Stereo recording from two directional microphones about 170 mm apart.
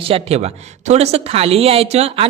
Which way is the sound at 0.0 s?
35° right (ahead or behind).